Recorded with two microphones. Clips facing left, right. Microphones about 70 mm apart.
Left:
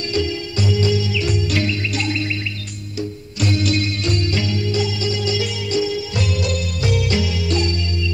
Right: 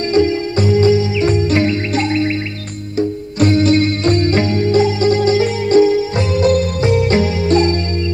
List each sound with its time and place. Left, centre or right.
0.1 s music: right